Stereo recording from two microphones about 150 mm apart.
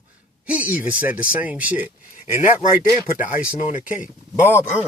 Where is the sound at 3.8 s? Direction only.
10° right (ahead or behind).